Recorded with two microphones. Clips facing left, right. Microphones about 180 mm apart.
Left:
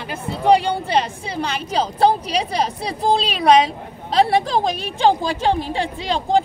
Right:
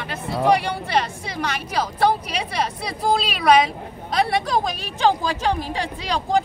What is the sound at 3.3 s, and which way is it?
Speech, 30° left (ahead or behind).